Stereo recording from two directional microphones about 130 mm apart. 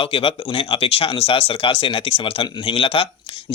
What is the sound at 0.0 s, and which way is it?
Speech, 45° left (ahead or behind).